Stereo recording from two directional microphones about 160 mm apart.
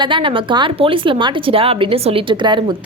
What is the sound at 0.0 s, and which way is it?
A woman's voice, 30° right (ahead or behind).